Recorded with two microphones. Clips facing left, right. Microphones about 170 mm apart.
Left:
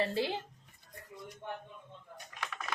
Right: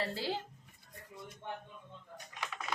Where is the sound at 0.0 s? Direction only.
20° left (ahead or behind).